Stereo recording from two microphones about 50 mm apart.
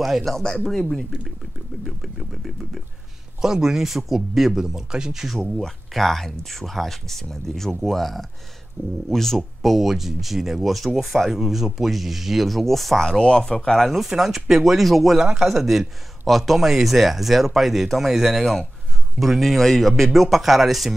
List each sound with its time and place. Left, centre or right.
0.0 s speech: centre
0.4 s speech: centre
0.7 s speech: centre
1.9 s a sound: centre
3.3 s speech: centre
5.4 s speech: centre
8.8 s speech: right
9.1 s speech: centre
13.7 s speech: centre